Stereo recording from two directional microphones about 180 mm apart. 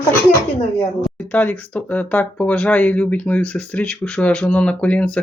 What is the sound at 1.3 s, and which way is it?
Speech, 10° left (ahead or behind).